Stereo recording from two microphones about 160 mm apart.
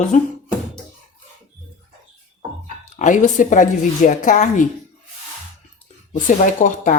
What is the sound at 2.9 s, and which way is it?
Speech, 50° left (ahead or behind).